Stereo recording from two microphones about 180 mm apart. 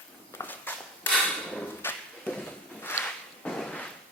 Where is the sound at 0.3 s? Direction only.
10° left (ahead or behind).